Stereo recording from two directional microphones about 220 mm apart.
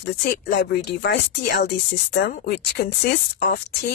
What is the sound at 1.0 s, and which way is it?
Speech, 50° left (ahead or behind).